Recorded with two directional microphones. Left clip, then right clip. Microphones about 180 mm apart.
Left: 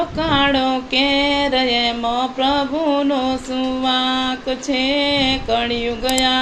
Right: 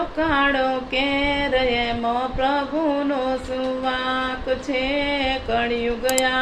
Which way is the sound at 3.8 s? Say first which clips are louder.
Left 7 dB; 40° left (ahead or behind).